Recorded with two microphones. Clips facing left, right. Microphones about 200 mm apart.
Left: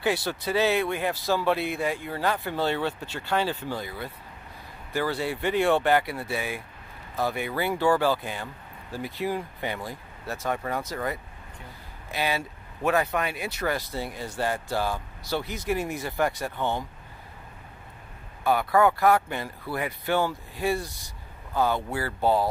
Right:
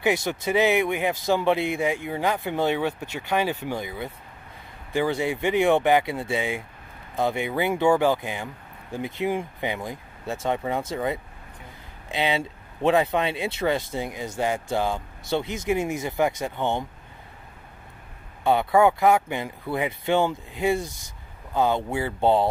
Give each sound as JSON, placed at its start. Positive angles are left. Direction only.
{"t": 0.0, "sound": "speech", "side_deg": -20}
{"t": 18.4, "sound": "speech", "side_deg": -25}